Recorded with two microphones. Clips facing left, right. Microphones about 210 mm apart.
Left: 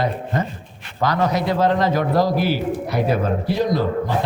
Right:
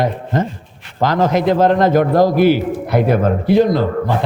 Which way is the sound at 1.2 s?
50° right (ahead or behind).